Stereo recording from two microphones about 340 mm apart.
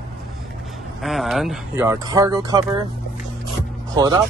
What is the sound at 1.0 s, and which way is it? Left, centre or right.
Speech, centre.